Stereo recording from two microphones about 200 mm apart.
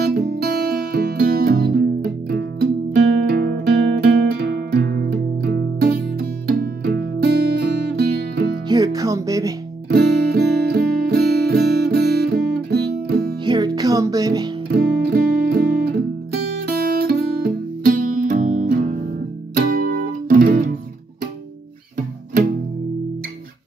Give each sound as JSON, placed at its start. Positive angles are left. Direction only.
{"t": 0.0, "sound": "music", "side_deg": -50}
{"t": 8.6, "sound": "music", "side_deg": -20}
{"t": 9.8, "sound": "music", "side_deg": -50}
{"t": 13.5, "sound": "music", "side_deg": -20}
{"t": 14.7, "sound": "guitar", "side_deg": -50}
{"t": 16.6, "sound": "music", "side_deg": -50}